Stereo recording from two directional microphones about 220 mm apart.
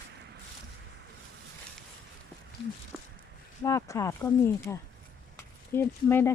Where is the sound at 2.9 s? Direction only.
5° right (ahead or behind).